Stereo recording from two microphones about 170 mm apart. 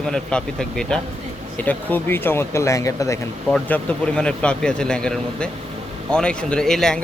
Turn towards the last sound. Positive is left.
turn(degrees=5)  # may be behind; listen again after turning